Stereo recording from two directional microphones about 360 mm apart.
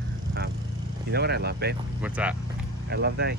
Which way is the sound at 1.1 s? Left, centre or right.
Right.